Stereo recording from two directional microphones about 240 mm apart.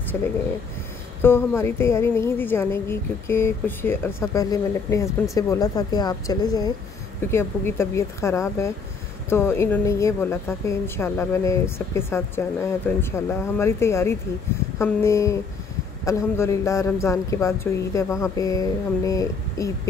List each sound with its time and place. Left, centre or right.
1.2 s speech: centre